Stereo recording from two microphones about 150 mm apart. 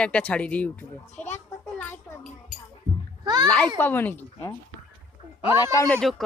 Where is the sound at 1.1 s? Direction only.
50° left (ahead or behind).